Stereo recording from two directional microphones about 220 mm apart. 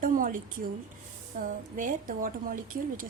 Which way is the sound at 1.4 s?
40° right (ahead or behind).